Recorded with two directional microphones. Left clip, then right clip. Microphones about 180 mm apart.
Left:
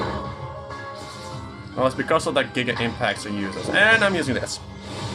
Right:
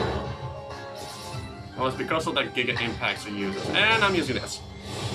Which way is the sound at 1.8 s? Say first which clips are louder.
Left 6 dB; 45° left (ahead or behind).